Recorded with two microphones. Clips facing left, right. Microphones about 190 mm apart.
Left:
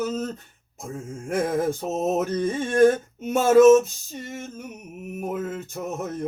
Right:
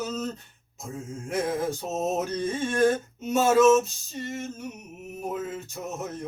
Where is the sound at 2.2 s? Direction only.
55° left (ahead or behind).